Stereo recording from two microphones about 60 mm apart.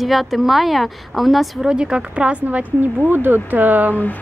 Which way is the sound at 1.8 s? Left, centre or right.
Centre.